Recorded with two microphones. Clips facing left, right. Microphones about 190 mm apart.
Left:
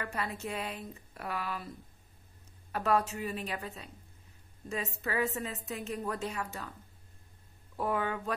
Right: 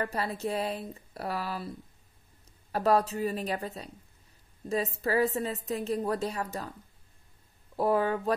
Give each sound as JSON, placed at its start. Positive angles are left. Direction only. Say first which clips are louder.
{"t": 0.0, "sound": "a woman's voice", "louder": "right 5 dB", "side_deg": -35}
{"t": 2.7, "sound": "a woman's voice", "louder": "right 4 dB", "side_deg": -35}
{"t": 7.7, "sound": "a woman's voice", "louder": "right 6 dB", "side_deg": -35}